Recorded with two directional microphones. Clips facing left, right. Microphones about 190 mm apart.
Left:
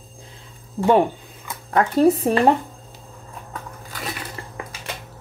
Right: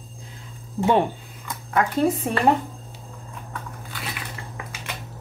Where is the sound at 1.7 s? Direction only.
35° left (ahead or behind).